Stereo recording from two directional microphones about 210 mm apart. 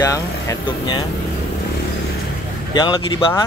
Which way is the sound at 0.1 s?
20° left (ahead or behind).